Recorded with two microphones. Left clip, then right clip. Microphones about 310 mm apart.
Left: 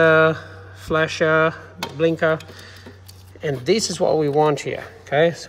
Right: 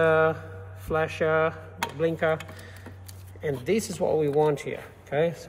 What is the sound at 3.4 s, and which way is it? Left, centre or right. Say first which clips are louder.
Speech: left 7 dB; left.